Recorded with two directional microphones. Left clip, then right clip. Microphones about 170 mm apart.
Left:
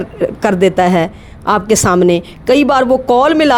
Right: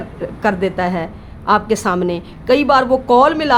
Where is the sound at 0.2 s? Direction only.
45° left (ahead or behind).